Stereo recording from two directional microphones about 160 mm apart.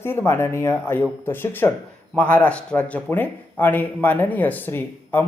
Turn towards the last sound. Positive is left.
turn(degrees=15)  # may be behind; listen again after turning